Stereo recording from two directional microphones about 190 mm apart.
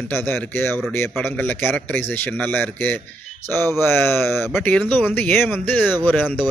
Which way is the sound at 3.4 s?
35° left (ahead or behind).